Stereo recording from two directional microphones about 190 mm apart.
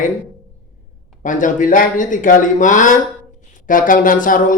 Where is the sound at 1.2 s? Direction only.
40° left (ahead or behind).